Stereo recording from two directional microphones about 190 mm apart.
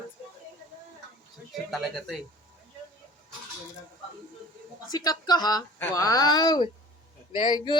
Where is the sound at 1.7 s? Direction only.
Centre (ahead or behind).